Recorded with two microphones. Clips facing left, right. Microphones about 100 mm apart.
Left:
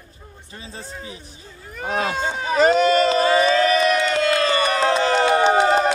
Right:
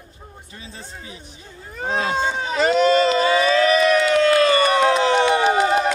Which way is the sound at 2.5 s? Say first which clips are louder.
Left 1 dB; 40° left (ahead or behind).